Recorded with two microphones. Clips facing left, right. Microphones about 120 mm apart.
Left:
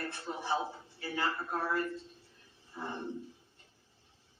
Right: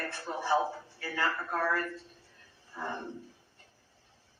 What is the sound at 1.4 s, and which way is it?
Speech, 65° right (ahead or behind).